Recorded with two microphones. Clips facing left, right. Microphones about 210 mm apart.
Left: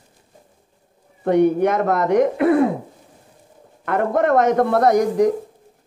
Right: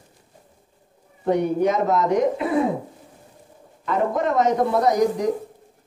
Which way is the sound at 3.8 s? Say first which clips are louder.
Left 3 dB; 60° left (ahead or behind).